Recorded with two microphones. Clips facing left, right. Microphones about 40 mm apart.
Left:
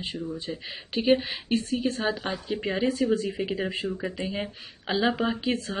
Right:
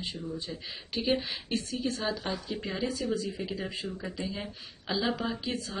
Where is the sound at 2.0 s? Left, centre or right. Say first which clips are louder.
Left 4 dB; left.